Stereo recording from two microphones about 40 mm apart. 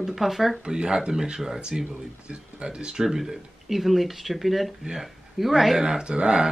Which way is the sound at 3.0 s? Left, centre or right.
Centre.